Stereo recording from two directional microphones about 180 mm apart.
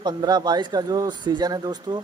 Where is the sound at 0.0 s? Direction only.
25° right (ahead or behind).